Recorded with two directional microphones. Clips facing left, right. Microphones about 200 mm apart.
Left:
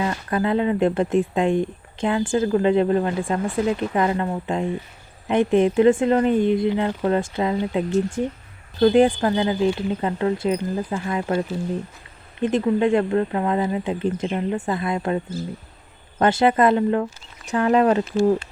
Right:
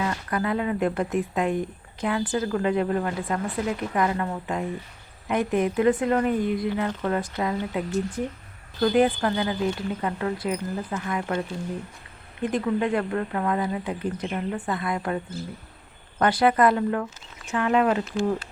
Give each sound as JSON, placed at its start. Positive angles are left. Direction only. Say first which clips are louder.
{"t": 0.0, "sound": "speech", "louder": "left 4 dB", "side_deg": 25}
{"t": 12.4, "sound": "speech", "louder": "left 5 dB", "side_deg": 25}
{"t": 17.4, "sound": "speech", "louder": "left 4 dB", "side_deg": 35}